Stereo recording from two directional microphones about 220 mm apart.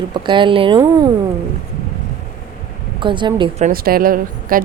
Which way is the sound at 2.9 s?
20° right (ahead or behind).